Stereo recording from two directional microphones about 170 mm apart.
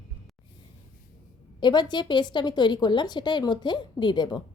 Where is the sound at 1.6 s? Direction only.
25° left (ahead or behind).